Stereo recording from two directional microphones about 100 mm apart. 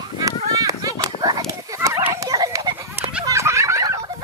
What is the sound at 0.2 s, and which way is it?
Run, 35° right (ahead or behind).